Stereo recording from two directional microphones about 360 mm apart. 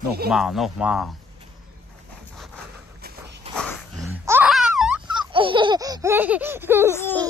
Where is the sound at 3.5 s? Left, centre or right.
Centre.